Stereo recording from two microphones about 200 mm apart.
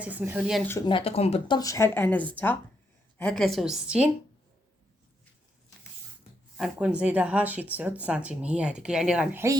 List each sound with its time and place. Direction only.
0.0 s speech: 10° right (ahead or behind)
0.6 s speech: 10° left (ahead or behind)
0.9 s speech: 25° left (ahead or behind); by 4.1 s 5° right (ahead or behind)
6.6 s speech: 5° right (ahead or behind)